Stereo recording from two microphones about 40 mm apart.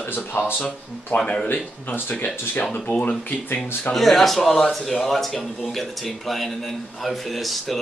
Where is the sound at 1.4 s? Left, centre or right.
Left.